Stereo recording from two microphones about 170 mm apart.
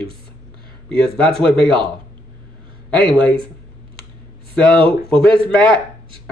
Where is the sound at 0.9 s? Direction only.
5° left (ahead or behind).